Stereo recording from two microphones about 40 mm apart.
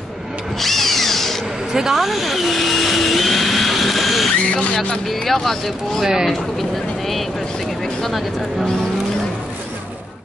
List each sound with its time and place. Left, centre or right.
0.6 s drill: centre
1.7 s speech: centre
2.0 s vehicle: centre
4.7 s speech: centre
5.1 s speech: centre
6.0 s speech: centre
7.8 s speech: centre